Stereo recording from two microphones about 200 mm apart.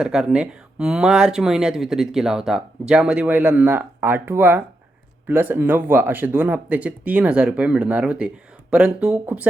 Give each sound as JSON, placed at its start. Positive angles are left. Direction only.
{"t": 0.0, "sound": "speech", "side_deg": -5}